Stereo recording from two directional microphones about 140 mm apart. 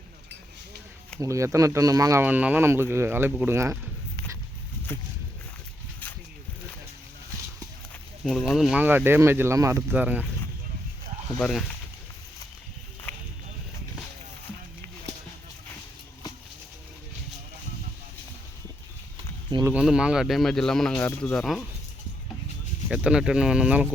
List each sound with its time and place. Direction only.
1.2 s speech: 25° right (ahead or behind)
2.2 s speech: 10° right (ahead or behind)
4.9 s speech: 15° left (ahead or behind)
8.2 s speech: centre (ahead or behind)
8.8 s speech: 15° right (ahead or behind)
9.9 s speech: 10° right (ahead or behind)
11.3 s speech: centre (ahead or behind)
19.8 s speech: 5° right (ahead or behind)
22.9 s speech: 5° right (ahead or behind)